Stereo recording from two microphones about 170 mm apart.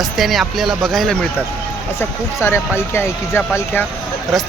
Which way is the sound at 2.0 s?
15° left (ahead or behind).